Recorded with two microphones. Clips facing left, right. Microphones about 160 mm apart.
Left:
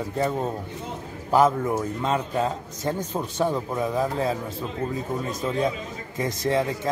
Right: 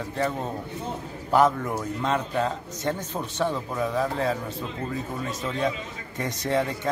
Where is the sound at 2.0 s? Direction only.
5° left (ahead or behind).